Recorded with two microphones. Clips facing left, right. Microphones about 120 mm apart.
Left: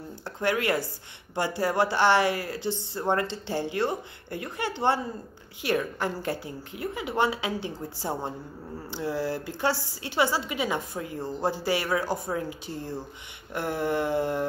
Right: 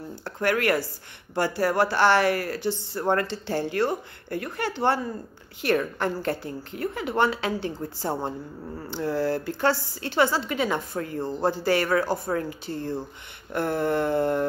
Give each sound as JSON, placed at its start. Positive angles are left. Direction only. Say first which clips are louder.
{"t": 0.2, "sound": "a woman's voice", "louder": "right 2 dB", "side_deg": 20}
{"t": 11.1, "sound": "speech", "louder": "right 4 dB", "side_deg": -15}
{"t": 11.4, "sound": "a woman's voice", "louder": "right 4 dB", "side_deg": 15}